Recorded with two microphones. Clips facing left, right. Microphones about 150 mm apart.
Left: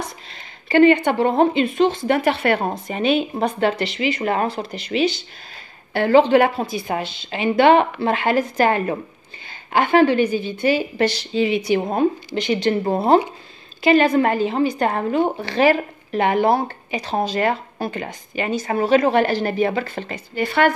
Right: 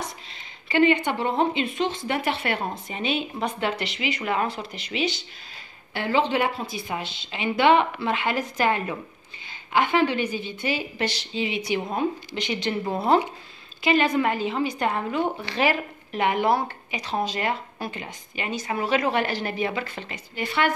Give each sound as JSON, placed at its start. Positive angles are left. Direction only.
{"t": 0.7, "sound": "a woman's voice", "side_deg": 45}